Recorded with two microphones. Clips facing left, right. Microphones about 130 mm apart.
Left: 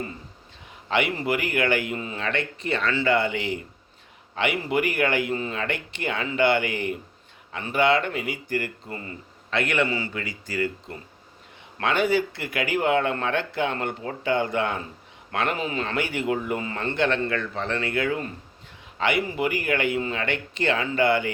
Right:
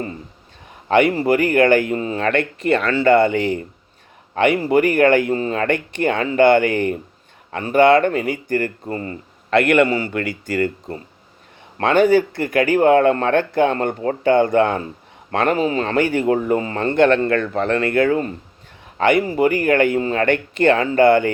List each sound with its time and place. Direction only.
0.9 s speech: 45° right (ahead or behind)
9.5 s a man's voice: 55° right (ahead or behind)
10.9 s speech: 35° right (ahead or behind)